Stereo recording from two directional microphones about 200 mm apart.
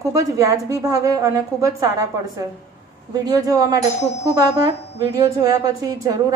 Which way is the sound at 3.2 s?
20° right (ahead or behind).